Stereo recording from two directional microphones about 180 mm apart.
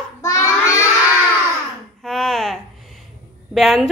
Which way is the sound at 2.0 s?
Centre (ahead or behind).